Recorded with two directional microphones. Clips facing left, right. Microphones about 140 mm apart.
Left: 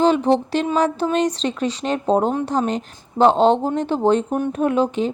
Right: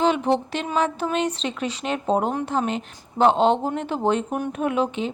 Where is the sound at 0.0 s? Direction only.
35° left (ahead or behind).